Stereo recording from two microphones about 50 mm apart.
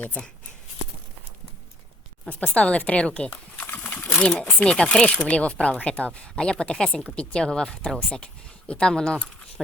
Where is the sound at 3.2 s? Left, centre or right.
Left.